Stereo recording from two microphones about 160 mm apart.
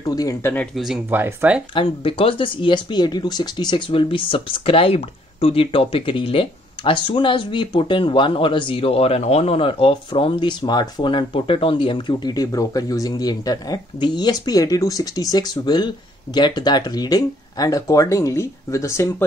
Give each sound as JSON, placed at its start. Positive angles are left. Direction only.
{"t": 0.0, "sound": "speech", "side_deg": 20}
{"t": 0.7, "sound": "speech", "side_deg": -5}
{"t": 1.7, "sound": "speech", "side_deg": 35}